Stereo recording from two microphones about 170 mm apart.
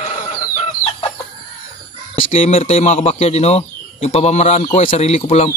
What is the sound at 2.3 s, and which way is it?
Speech, 35° left (ahead or behind).